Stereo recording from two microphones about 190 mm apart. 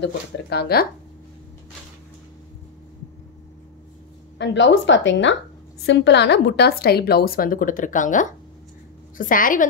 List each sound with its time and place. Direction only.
0.0 s a woman's voice: 60° left (ahead or behind)
4.4 s a woman's voice: 70° left (ahead or behind); by 9.7 s 45° left (ahead or behind)